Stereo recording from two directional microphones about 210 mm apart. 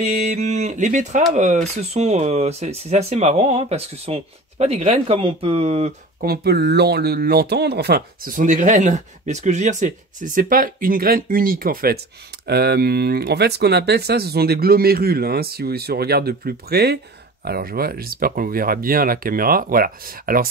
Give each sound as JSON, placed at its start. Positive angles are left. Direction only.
{"t": 0.0, "sound": "speech", "side_deg": -35}
{"t": 6.2, "sound": "speech", "side_deg": -50}